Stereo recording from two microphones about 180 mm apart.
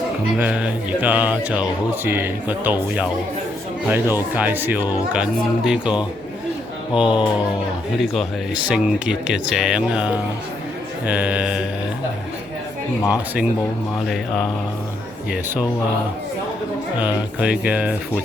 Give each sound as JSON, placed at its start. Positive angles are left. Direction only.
{"t": 0.3, "sound": "music", "side_deg": -5}
{"t": 5.1, "sound": "speech", "side_deg": -5}
{"t": 7.0, "sound": "speech", "side_deg": 25}
{"t": 8.0, "sound": "speech", "side_deg": 0}
{"t": 11.0, "sound": "music", "side_deg": -5}
{"t": 13.0, "sound": "speech", "side_deg": 20}
{"t": 14.1, "sound": "speech", "side_deg": 0}
{"t": 15.3, "sound": "music", "side_deg": -10}
{"t": 17.4, "sound": "music", "side_deg": -5}